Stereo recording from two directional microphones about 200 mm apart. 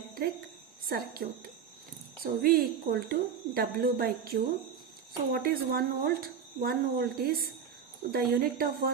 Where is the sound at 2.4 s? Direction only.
50° right (ahead or behind).